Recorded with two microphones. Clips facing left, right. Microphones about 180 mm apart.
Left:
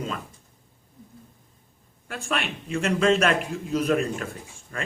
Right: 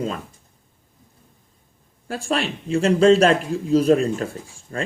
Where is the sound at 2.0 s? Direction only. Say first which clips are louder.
Right 6 dB; 35° right (ahead or behind).